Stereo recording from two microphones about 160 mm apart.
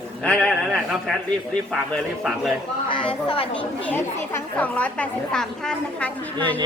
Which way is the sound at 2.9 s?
30° left (ahead or behind).